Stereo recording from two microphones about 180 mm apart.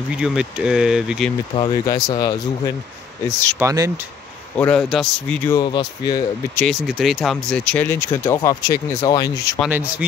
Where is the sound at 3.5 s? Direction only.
15° right (ahead or behind).